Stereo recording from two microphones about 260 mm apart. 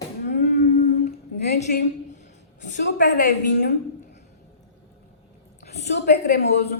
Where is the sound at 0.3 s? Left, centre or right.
Left.